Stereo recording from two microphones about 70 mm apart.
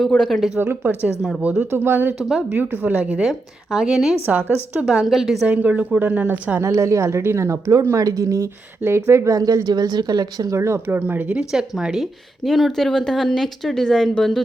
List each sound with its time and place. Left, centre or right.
0.3 s speech: centre
0.6 s speech: right
1.4 s speech: centre
1.7 s speech: right
3.2 s speech: centre
4.3 s speech: right
5.0 s speech: centre
5.5 s speech: right
6.7 s speech: right
9.6 s speech: right
10.5 s speech: right; by 14.4 s centre